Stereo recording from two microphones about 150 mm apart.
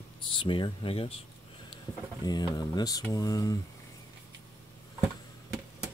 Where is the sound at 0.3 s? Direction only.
35° left (ahead or behind).